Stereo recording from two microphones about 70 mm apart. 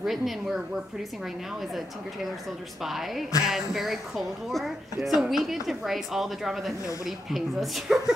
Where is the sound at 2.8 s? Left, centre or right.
Centre.